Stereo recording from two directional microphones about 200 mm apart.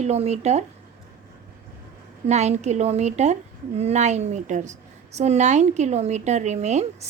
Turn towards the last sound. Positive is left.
turn(degrees=-35)  # may be behind; listen again after turning